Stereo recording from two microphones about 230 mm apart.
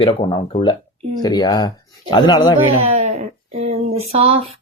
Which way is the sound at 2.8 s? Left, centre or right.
Right.